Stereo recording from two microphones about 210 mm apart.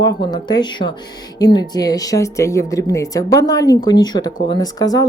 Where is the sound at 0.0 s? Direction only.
20° left (ahead or behind).